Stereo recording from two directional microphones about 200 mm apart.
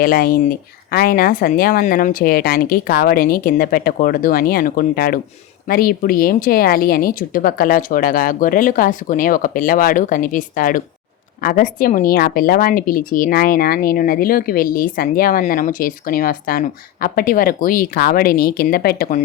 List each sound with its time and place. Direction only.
0.0 s a woman's voice: 45° left (ahead or behind)